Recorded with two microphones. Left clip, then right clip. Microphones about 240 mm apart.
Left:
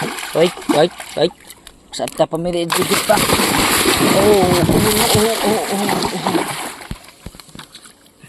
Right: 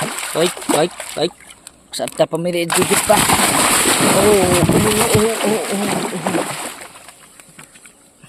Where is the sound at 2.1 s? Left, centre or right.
Centre.